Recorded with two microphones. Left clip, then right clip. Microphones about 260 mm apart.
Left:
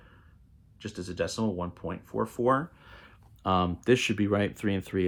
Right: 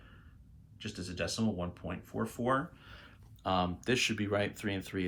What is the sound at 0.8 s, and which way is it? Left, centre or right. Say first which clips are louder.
Speech: left 6 dB; left.